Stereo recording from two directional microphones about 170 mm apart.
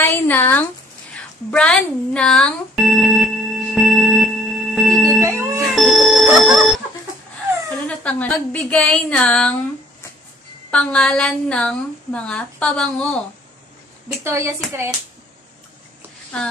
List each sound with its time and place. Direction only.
0.0 s a woman's voice: 10° left (ahead or behind)
1.1 s a sound: 5° left (ahead or behind)
5.2 s music: 15° right (ahead or behind)
5.6 s music: centre (ahead or behind)
8.0 s a woman's voice: 10° left (ahead or behind)
10.7 s a woman's voice: 5° left (ahead or behind)
14.2 s speech: 15° right (ahead or behind)